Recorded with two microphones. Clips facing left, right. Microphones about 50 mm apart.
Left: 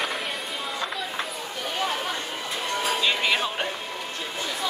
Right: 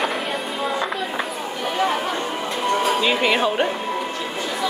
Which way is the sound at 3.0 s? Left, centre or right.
Centre.